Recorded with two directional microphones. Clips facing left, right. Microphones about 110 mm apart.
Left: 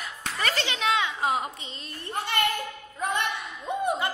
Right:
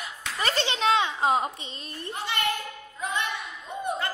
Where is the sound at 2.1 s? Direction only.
50° left (ahead or behind).